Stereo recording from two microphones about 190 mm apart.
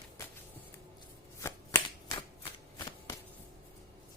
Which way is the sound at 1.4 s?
15° left (ahead or behind).